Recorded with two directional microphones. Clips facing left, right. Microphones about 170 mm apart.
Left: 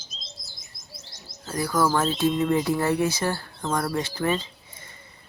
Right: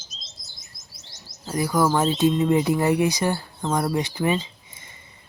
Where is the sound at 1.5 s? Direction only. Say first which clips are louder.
Right 2 dB; 15° right (ahead or behind).